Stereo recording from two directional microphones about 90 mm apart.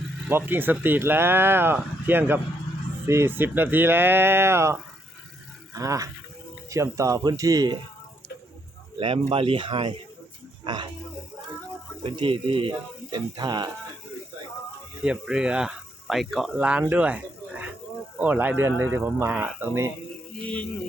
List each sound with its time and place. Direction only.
0.3 s speech: 25° right (ahead or behind); by 7.8 s 45° right (ahead or behind)
9.0 s speech: 75° right (ahead or behind)
10.6 s speech: 55° right (ahead or behind)
12.0 s speech: 75° right (ahead or behind); by 13.7 s 55° right (ahead or behind)
15.0 s speech: 10° right (ahead or behind)
16.6 s speech: 15° right (ahead or behind)
16.9 s a sound: 15° right (ahead or behind)
18.2 s speech: 20° right (ahead or behind)